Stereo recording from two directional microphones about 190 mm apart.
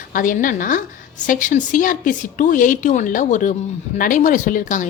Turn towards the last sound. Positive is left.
turn(degrees=45)  # may be behind; listen again after turning